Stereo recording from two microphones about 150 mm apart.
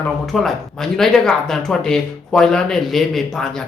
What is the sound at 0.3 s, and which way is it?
Speech, centre (ahead or behind).